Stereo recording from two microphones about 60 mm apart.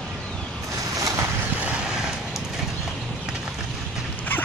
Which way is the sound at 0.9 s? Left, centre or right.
Right.